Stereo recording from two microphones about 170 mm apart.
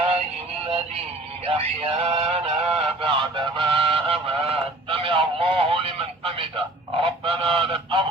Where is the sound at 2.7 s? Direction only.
30° right (ahead or behind).